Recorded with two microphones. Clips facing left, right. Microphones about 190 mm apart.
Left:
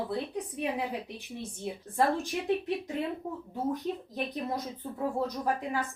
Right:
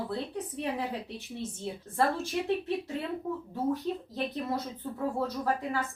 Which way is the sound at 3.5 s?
15° left (ahead or behind).